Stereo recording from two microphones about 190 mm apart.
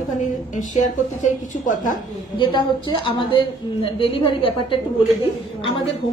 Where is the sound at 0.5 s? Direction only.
40° left (ahead or behind).